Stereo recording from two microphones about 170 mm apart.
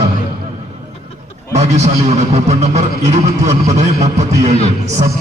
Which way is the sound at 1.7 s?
40° right (ahead or behind).